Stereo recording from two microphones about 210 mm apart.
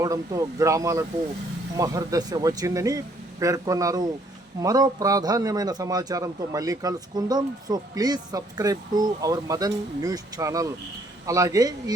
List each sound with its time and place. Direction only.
0.0 s a man's voice: 15° right (ahead or behind)